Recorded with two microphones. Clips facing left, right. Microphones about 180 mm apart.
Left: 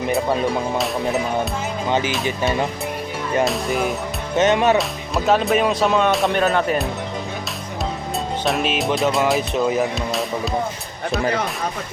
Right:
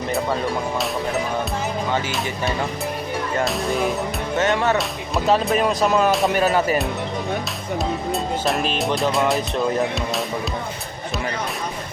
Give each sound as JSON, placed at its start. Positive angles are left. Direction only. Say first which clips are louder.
{"t": 1.9, "sound": "speech", "louder": "left 6 dB", "side_deg": 20}
{"t": 3.4, "sound": "speech", "louder": "even", "side_deg": 0}
{"t": 4.4, "sound": "speech", "louder": "left 4 dB", "side_deg": 20}
{"t": 4.8, "sound": "speech", "louder": "left 1 dB", "side_deg": 0}
{"t": 8.4, "sound": "speech", "louder": "left 3 dB", "side_deg": 0}